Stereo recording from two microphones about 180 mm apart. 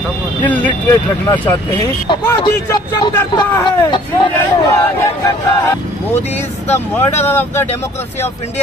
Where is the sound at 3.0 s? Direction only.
25° left (ahead or behind).